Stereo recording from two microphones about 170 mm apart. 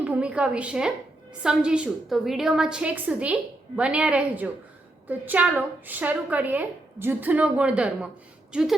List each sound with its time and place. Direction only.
0.0 s a woman's voice: 5° right (ahead or behind)